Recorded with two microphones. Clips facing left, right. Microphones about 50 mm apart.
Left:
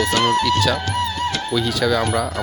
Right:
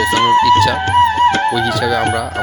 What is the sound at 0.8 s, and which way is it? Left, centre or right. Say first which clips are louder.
Music: right 11 dB; right.